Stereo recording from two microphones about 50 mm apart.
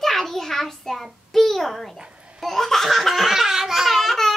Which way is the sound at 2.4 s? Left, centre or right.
Centre.